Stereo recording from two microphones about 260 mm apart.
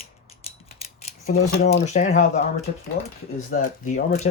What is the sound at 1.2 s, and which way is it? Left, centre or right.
Speech, left.